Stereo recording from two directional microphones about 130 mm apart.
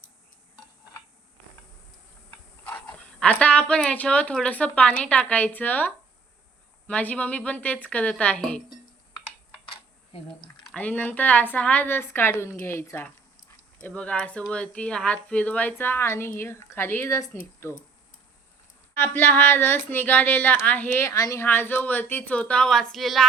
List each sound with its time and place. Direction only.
2.3 s speech: 10° left (ahead or behind)
9.6 s a sound: 40° left (ahead or behind)
10.7 s speech: 10° left (ahead or behind)
18.9 s speech: 15° left (ahead or behind); by 23.2 s centre (ahead or behind)